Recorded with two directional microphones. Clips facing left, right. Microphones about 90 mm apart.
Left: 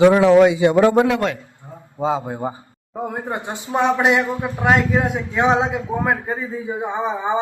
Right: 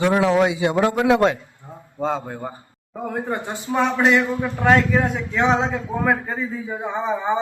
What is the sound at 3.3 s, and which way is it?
A man's voice, 20° left (ahead or behind).